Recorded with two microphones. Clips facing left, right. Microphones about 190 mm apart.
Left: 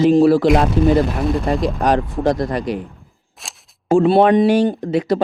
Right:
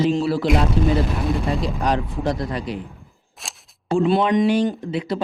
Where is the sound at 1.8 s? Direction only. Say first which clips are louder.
Left 5 dB; 45° left (ahead or behind).